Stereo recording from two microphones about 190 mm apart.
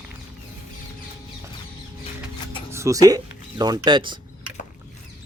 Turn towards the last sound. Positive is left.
turn(degrees=-25)  # may be behind; listen again after turning